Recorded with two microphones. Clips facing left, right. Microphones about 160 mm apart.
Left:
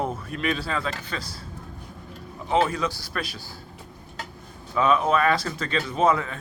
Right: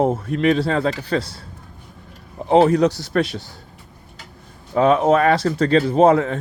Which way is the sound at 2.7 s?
70° right (ahead or behind).